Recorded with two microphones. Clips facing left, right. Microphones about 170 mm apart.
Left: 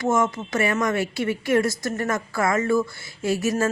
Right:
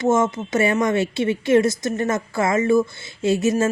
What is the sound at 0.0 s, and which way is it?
A woman's voice, 25° right (ahead or behind).